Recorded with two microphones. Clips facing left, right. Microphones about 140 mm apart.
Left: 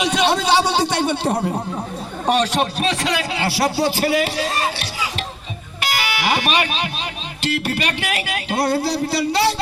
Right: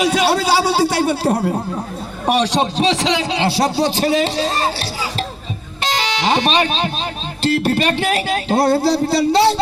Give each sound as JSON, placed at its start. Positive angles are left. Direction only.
{"t": 0.0, "sound": "a man's voice", "side_deg": -5}
{"t": 2.8, "sound": "a man's voice", "side_deg": -25}